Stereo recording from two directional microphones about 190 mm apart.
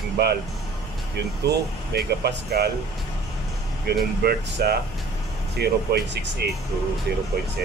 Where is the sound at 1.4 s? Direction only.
60° right (ahead or behind).